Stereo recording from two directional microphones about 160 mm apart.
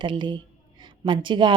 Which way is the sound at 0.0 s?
30° right (ahead or behind).